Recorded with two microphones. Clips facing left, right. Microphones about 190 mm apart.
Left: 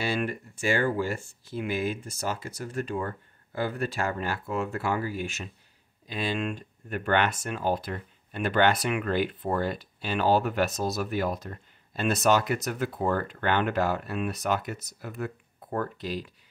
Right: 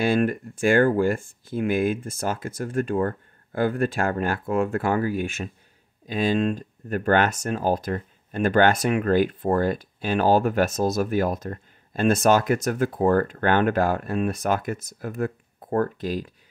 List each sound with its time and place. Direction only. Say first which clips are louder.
0.0 s speech: right 8 dB; 50° right (ahead or behind)